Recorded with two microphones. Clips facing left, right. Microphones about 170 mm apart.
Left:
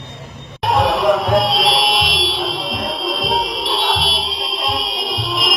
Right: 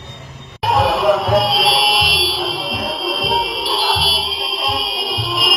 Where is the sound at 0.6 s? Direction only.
Centre (ahead or behind).